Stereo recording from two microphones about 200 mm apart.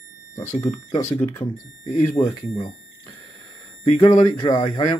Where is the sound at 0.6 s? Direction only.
15° left (ahead or behind).